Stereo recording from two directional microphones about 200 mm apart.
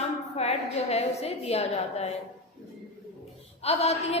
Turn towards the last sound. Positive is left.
turn(degrees=30)  # may be behind; listen again after turning